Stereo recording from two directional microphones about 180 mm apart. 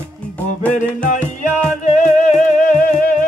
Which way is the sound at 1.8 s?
45° left (ahead or behind).